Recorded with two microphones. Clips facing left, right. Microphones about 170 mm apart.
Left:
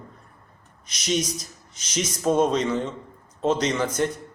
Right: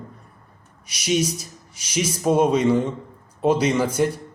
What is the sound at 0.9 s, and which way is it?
Speech, 10° right (ahead or behind).